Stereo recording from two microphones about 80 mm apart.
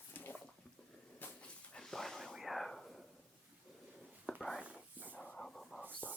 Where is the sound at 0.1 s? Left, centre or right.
Left.